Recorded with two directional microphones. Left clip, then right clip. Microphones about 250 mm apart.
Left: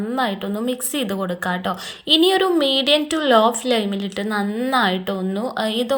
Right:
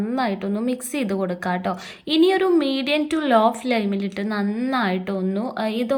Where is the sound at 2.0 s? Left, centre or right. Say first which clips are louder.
Left 2 dB; centre.